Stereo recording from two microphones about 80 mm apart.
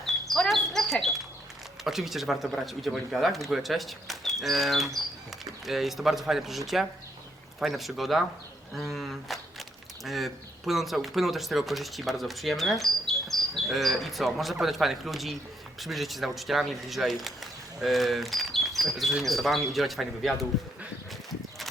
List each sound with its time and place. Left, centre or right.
0.0 s bird: centre
1.8 s speech: centre